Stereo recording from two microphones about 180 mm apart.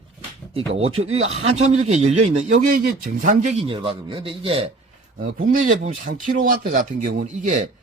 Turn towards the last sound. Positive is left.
turn(degrees=-40)  # may be behind; listen again after turning